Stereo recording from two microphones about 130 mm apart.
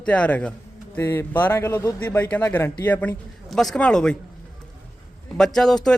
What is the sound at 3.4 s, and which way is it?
Speech, 5° left (ahead or behind).